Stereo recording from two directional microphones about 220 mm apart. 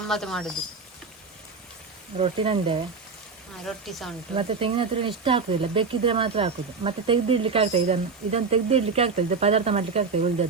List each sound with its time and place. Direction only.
0.1 s speech: centre (ahead or behind)
2.1 s speech: 25° right (ahead or behind)
3.7 s speech: centre (ahead or behind)
4.4 s speech: 25° right (ahead or behind)